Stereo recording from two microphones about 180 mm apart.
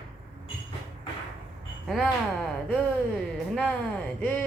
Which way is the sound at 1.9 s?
Centre (ahead or behind).